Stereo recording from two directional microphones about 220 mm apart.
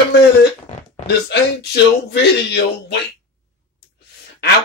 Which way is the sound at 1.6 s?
50° left (ahead or behind).